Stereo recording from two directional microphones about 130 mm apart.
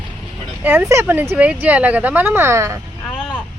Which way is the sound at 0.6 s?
15° right (ahead or behind).